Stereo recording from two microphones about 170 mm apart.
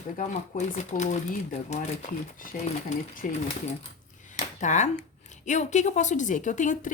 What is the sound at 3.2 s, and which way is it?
Speech, 50° left (ahead or behind).